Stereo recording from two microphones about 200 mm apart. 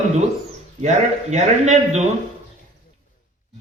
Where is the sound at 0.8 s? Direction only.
35° right (ahead or behind).